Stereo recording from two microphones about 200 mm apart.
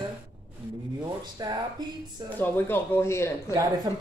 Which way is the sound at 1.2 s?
20° right (ahead or behind).